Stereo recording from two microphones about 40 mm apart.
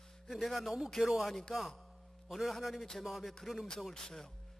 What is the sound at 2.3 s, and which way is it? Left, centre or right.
A man's voice, centre.